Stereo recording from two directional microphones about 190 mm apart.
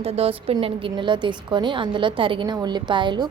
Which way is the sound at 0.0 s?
30° right (ahead or behind).